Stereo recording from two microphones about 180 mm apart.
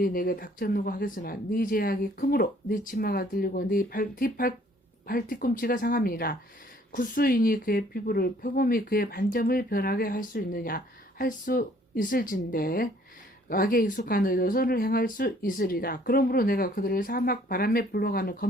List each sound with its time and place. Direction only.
0.0 s a woman's voice: 55° left (ahead or behind)